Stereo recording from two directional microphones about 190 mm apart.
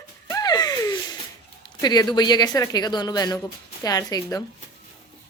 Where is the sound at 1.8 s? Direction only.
20° left (ahead or behind).